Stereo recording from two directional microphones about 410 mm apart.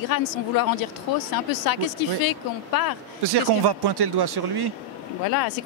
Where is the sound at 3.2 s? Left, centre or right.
Right.